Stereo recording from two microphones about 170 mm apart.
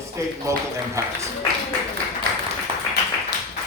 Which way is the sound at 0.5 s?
20° right (ahead or behind).